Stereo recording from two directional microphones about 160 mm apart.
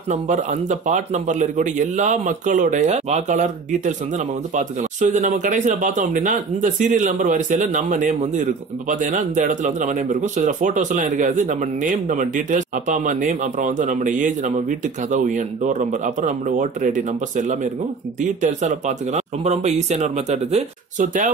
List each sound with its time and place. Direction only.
0.1 s speech: 50° right (ahead or behind)